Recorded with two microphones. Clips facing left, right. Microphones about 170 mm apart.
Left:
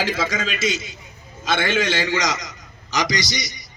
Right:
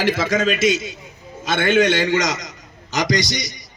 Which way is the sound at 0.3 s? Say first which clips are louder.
Right 8 dB; 60° right (ahead or behind).